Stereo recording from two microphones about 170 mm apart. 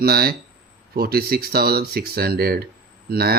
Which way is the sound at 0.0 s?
65° right (ahead or behind).